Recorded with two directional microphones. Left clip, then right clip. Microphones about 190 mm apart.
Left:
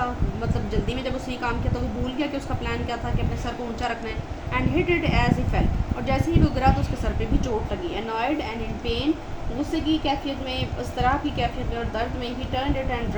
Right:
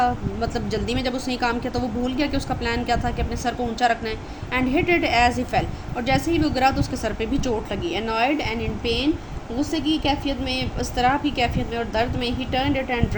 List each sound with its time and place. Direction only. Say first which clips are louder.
0.7 s a woman's voice: right 3 dB; 50° right (ahead or behind)
2.6 s a woman's voice: right 8 dB; 50° right (ahead or behind)